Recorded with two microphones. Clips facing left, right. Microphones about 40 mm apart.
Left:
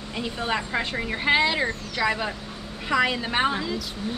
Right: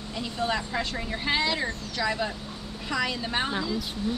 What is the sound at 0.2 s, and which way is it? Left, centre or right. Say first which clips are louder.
Speech: left 1 dB; left.